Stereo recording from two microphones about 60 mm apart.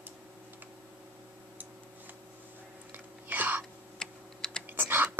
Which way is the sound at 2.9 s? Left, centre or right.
Right.